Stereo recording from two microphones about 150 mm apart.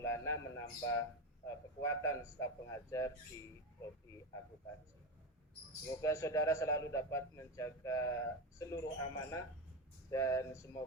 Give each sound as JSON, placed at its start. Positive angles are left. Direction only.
{"t": 0.0, "sound": "a man's voice", "side_deg": 20}
{"t": 6.0, "sound": "a man's voice", "side_deg": 20}